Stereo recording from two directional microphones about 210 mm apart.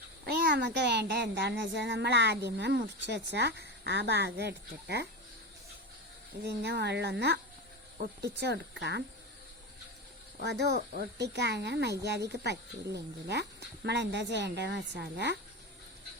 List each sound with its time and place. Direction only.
0.3 s speech: 50° right (ahead or behind)
6.4 s speech: 55° right (ahead or behind)
10.4 s speech: 55° right (ahead or behind)